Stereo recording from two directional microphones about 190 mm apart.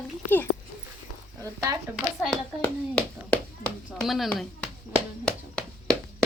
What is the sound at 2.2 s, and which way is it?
A child's voice, 5° left (ahead or behind).